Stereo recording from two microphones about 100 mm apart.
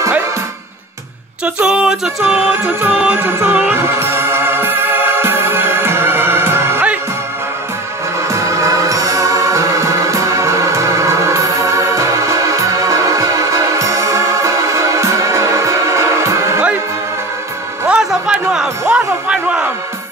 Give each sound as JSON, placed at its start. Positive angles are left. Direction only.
{"t": 1.4, "sound": "music", "side_deg": -10}
{"t": 3.0, "sound": "music", "side_deg": -20}
{"t": 8.3, "sound": "music", "side_deg": -30}
{"t": 17.8, "sound": "a sound", "side_deg": -10}